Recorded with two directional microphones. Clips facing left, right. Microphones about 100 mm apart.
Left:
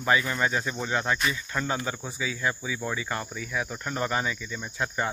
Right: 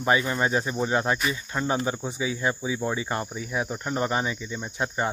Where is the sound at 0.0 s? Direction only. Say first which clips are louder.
Right 2 dB; 25° right (ahead or behind).